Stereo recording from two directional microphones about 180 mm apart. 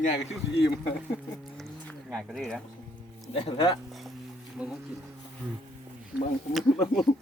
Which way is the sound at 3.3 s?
30° left (ahead or behind).